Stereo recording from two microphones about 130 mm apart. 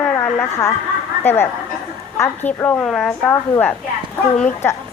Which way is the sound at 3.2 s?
15° left (ahead or behind).